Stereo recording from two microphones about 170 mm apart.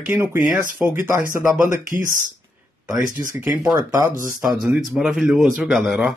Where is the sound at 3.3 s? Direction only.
10° right (ahead or behind).